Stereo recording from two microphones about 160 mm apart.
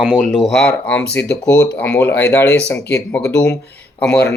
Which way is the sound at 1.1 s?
90° left.